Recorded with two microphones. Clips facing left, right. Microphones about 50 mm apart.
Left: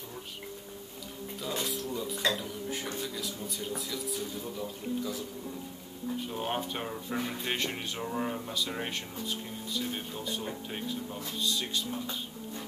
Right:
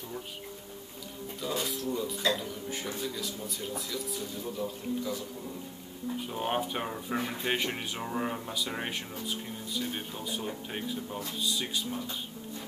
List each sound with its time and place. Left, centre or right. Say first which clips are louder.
1.4 s speech: right 2 dB; centre
6.2 s speech: right 4 dB; centre